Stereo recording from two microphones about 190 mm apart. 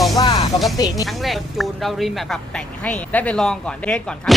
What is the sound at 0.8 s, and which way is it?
Speech, 20° left (ahead or behind).